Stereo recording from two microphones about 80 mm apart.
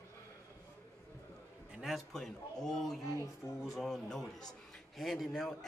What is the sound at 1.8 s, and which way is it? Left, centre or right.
A man's voice, centre.